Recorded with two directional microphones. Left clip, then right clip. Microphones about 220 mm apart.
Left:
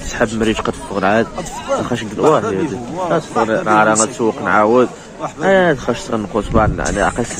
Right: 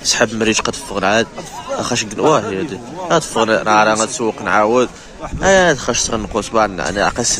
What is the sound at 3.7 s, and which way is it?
Speech, 15° right (ahead or behind).